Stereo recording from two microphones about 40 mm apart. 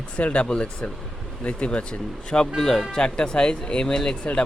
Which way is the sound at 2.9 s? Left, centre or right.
Left.